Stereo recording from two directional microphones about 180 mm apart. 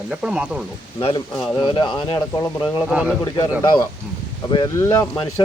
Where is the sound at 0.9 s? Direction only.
25° left (ahead or behind).